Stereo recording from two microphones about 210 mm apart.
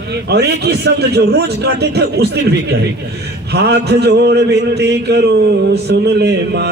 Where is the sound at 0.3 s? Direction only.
50° right (ahead or behind).